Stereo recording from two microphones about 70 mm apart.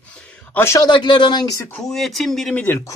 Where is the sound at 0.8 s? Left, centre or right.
Left.